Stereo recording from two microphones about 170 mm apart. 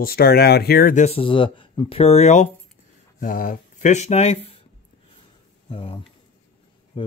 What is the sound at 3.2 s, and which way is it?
Speech, 55° left (ahead or behind).